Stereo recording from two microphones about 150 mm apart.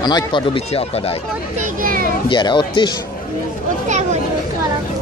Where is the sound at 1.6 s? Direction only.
65° right (ahead or behind).